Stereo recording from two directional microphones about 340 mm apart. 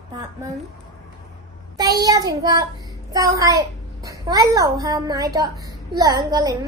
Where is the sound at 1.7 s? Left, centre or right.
Centre.